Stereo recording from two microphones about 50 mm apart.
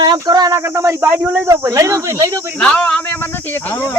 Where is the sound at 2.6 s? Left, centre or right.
Centre.